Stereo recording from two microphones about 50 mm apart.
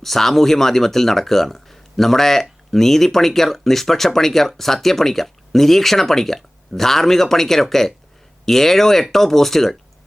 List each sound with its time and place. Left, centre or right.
0.0 s speech: centre